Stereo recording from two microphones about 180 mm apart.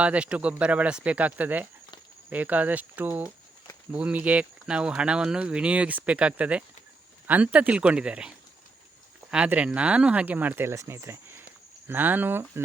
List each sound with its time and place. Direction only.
0.0 s speech: 5° right (ahead or behind)
9.3 s speech: 5° right (ahead or behind)